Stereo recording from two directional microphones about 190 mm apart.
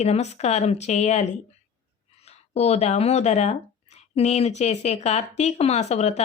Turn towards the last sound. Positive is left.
turn(degrees=35)  # may be behind; listen again after turning